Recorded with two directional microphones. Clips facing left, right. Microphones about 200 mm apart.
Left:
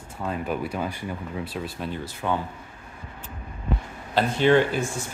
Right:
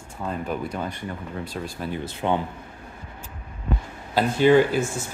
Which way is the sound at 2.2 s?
25° right (ahead or behind).